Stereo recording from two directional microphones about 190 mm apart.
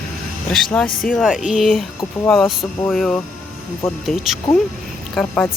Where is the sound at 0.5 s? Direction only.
5° left (ahead or behind).